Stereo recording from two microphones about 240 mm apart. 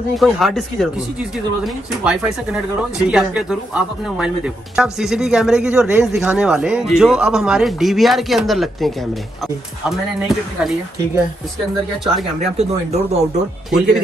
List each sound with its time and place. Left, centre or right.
0.2 s speech: centre
4.7 s speech: centre
12.5 s speech: right
13.7 s speech: centre